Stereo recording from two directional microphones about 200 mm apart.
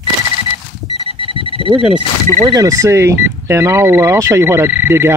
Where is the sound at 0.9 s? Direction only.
25° right (ahead or behind).